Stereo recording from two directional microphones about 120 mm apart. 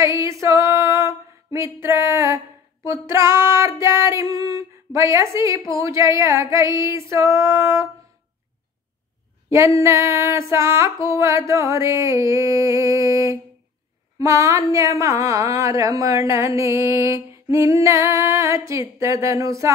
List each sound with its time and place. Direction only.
0.0 s female singing: 25° right (ahead or behind)
9.5 s a woman's voice: 25° right (ahead or behind)